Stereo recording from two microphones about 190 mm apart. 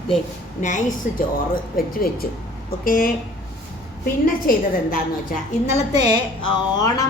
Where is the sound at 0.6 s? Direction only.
40° left (ahead or behind).